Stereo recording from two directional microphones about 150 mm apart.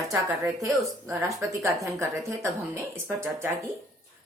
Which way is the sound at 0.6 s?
20° right (ahead or behind).